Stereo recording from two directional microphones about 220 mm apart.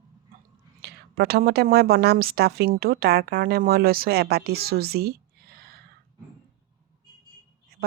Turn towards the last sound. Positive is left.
turn(degrees=-45)  # may be behind; listen again after turning